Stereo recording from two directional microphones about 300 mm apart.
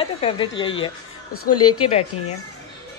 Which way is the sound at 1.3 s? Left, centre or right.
Left.